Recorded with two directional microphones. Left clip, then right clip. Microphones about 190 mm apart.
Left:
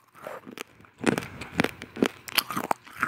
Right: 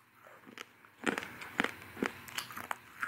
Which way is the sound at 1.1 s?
30° left (ahead or behind).